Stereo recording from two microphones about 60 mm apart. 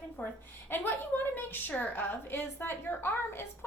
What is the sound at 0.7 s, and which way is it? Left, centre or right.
A woman's voice, left.